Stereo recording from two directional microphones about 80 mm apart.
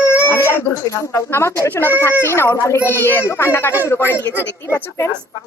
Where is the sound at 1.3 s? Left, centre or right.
Left.